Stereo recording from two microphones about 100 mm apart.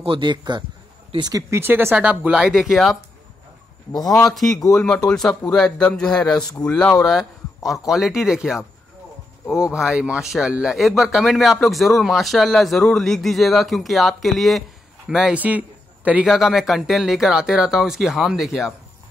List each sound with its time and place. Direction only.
0.0 s a man's voice: 55° right (ahead or behind)
1.3 s speech: 25° right (ahead or behind)
2.0 s speech: 10° right (ahead or behind)
4.2 s a man's voice: 5° left (ahead or behind)
15.3 s speech: 15° right (ahead or behind)
16.3 s speech: 5° right (ahead or behind)